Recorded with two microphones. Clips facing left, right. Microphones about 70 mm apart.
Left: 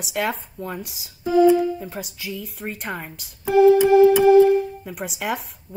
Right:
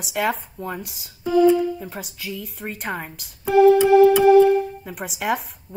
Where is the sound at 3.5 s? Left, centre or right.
Right.